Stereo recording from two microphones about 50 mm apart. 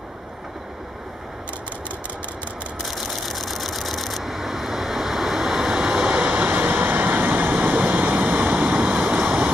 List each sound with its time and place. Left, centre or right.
2.8 s vehicle: centre
6.0 s vehicle: right
9.1 s a sound: centre